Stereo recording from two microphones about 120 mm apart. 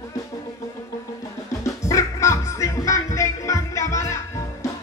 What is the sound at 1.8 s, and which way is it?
Music, 25° left (ahead or behind).